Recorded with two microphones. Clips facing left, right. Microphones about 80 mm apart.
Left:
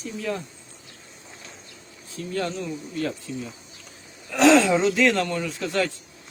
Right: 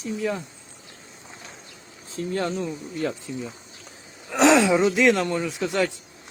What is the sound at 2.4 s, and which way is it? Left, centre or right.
Speech, right.